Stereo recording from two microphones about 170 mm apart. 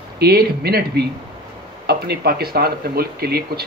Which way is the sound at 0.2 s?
70° right (ahead or behind).